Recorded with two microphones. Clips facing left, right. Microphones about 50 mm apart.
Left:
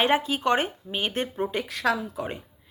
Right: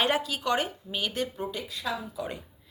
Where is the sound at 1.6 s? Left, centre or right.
Left.